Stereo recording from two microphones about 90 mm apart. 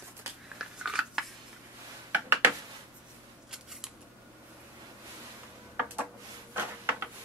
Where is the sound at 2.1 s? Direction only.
25° right (ahead or behind).